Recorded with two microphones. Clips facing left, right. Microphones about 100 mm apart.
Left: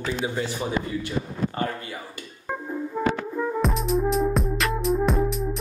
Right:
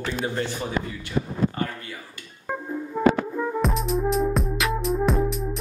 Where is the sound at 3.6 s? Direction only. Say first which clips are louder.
Left 1 dB; centre (ahead or behind).